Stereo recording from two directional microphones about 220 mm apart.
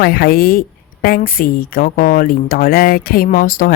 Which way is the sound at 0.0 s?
40° left (ahead or behind).